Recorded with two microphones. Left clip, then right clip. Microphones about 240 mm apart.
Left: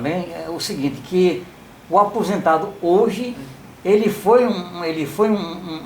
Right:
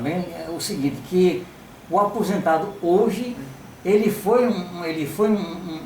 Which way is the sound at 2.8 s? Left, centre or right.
Left.